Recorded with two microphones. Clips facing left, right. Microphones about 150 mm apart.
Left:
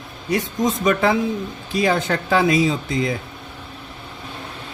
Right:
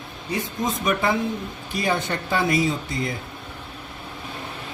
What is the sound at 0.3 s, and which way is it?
Speech, 90° left.